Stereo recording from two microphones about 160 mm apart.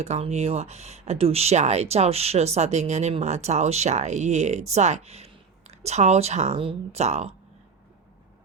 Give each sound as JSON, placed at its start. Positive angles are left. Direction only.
{"t": 0.0, "sound": "speech", "side_deg": -45}